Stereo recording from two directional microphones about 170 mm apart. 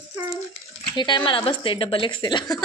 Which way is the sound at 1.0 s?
25° left (ahead or behind).